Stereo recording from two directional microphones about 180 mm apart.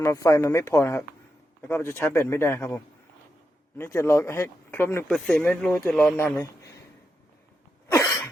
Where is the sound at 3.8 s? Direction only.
15° left (ahead or behind).